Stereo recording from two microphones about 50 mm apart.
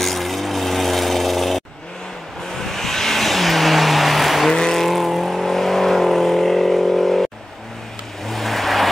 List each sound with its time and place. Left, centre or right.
0.0 s music: centre
2.6 s vehicle: centre
4.5 s vehicle: centre
8.3 s vehicle: centre